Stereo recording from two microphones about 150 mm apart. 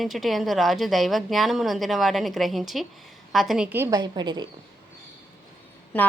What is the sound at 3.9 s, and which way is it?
Speech, 30° right (ahead or behind).